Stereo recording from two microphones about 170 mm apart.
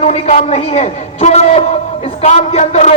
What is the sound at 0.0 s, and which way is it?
A man's voice, 40° left (ahead or behind).